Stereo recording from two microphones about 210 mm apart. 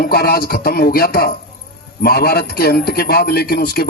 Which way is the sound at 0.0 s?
45° left (ahead or behind).